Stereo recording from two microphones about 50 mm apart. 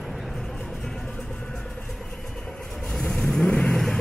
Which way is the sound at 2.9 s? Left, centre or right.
Centre.